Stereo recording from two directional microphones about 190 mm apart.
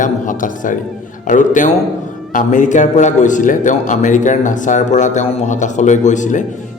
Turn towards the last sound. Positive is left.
turn(degrees=40)  # may be behind; listen again after turning